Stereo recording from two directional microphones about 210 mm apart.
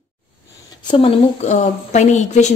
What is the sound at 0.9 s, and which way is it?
A woman's voice, 25° left (ahead or behind).